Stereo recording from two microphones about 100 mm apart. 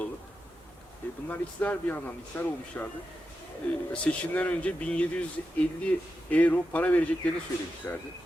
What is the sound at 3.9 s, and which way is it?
Speech, 15° left (ahead or behind).